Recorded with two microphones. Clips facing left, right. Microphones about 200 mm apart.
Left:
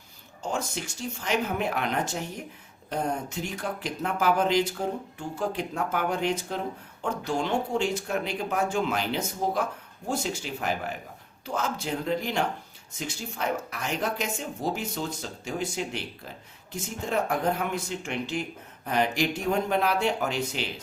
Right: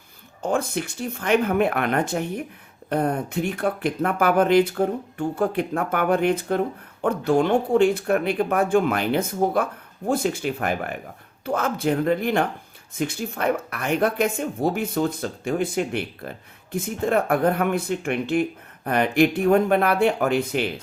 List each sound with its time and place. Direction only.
0.4 s speech: 55° right (ahead or behind)